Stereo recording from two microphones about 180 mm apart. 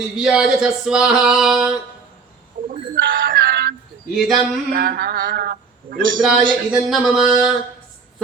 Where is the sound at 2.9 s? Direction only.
50° right (ahead or behind).